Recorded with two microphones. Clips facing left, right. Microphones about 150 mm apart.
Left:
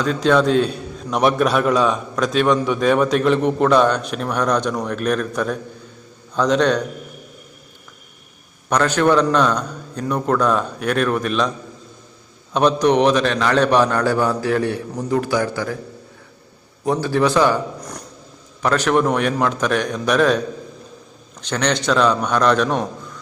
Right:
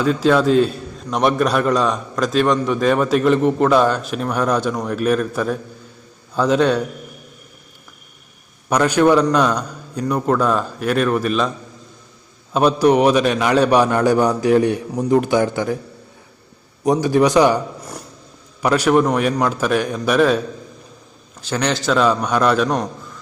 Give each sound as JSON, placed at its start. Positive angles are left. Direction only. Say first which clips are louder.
{"t": 0.0, "sound": "a man's voice", "louder": "right 1 dB", "side_deg": -5}
{"t": 8.7, "sound": "a man's voice", "louder": "right 2 dB", "side_deg": -10}
{"t": 12.5, "sound": "a man's voice", "louder": "right 1 dB", "side_deg": -5}
{"t": 16.8, "sound": "a man's voice", "louder": "right 3 dB", "side_deg": -15}
{"t": 21.4, "sound": "a man's voice", "louder": "even", "side_deg": -5}